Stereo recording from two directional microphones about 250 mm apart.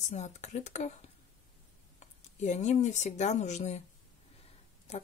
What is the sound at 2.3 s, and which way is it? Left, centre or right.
A woman's voice, left.